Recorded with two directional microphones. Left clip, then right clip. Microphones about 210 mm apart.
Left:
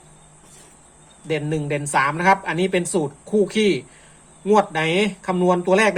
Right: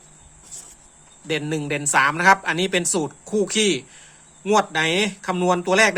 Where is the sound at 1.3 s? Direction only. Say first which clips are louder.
Left 1 dB; 20° right (ahead or behind).